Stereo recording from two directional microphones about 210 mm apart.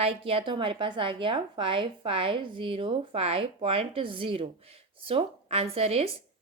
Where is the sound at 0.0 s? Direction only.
25° right (ahead or behind).